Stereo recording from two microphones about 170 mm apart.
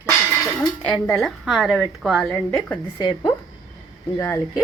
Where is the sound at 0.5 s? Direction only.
5° left (ahead or behind).